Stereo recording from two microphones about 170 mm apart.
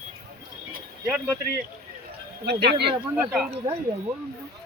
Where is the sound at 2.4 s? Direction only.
75° right (ahead or behind).